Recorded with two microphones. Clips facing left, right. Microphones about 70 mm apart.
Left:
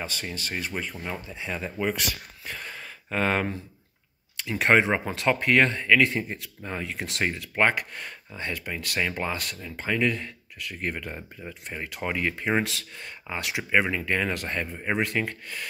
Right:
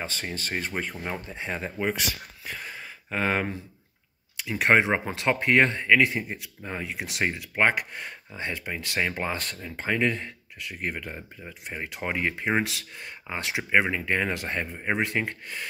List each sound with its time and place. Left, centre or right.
0.0 s speech: right
1.8 s speech: centre
11.6 s speech: centre
13.4 s speech: right